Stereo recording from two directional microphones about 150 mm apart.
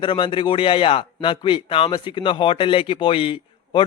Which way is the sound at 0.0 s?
35° left (ahead or behind).